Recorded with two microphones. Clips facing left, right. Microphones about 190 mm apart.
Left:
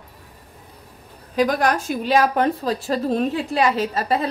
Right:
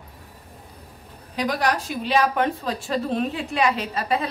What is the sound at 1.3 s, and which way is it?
A woman's voice, 50° left (ahead or behind).